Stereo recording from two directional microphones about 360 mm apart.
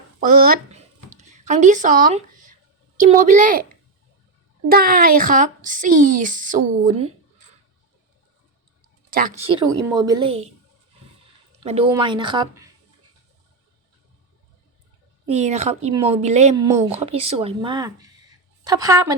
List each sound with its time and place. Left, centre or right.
0.2 s a woman's voice: right
4.7 s a child's voice: right
9.0 s speech: right
11.6 s speech: centre
15.3 s speech: centre